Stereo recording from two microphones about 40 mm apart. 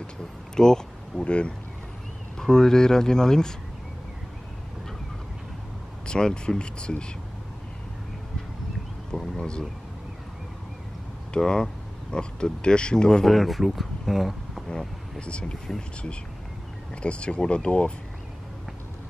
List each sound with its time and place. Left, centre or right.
0.6 s a sound: centre
1.2 s speech: left
2.3 s speech: centre
6.0 s speech: left
9.4 s speech: centre
11.3 s speech: centre
13.2 s speech: centre
14.7 s speech: left
16.9 s speech: left